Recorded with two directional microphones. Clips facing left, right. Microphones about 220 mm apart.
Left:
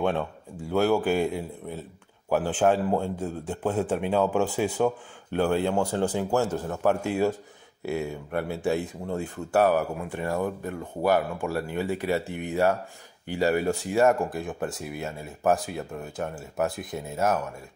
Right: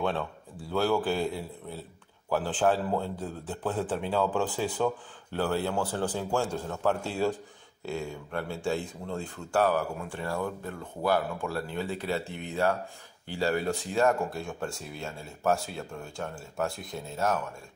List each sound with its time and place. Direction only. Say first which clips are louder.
0.0 s speech: left 4 dB; 15° left (ahead or behind)
2.2 s a sound: left 4 dB; 15° left (ahead or behind)
2.6 s speech: left 3 dB; 15° left (ahead or behind)
14.8 s speech: left 6 dB; 60° left (ahead or behind)
15.4 s speech: left 4 dB; 15° left (ahead or behind)